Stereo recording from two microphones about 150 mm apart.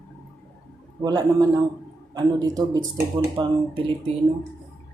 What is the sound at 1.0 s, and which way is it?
Speech, 25° right (ahead or behind).